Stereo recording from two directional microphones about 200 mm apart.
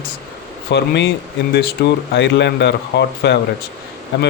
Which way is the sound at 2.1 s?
60° left (ahead or behind).